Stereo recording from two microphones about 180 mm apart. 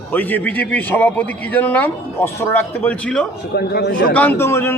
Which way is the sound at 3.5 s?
60° left (ahead or behind).